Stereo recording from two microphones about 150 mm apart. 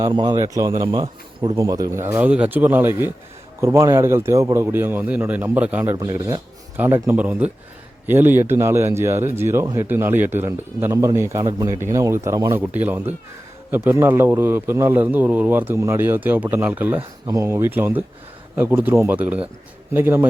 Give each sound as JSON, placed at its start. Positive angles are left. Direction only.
{"t": 0.0, "sound": "a man's voice", "side_deg": -30}
{"t": 5.9, "sound": "a man's voice", "side_deg": -25}